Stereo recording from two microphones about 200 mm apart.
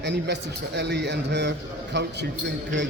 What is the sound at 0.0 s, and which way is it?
A man's voice, 60° right (ahead or behind).